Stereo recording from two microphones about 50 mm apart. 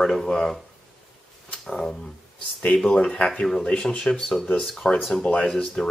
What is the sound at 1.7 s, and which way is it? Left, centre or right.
Speech, centre.